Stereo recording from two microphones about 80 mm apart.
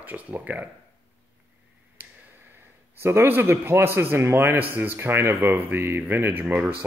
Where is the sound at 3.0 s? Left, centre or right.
Right.